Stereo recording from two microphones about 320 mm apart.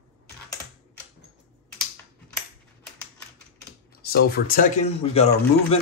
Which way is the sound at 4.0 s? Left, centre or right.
Left.